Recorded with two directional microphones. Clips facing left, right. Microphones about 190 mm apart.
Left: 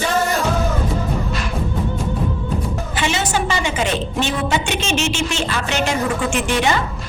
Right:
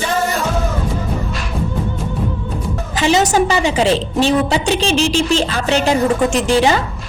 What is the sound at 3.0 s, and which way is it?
A woman's voice, 40° right (ahead or behind).